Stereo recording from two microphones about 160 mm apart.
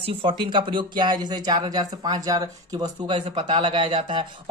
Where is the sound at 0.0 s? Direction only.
35° right (ahead or behind).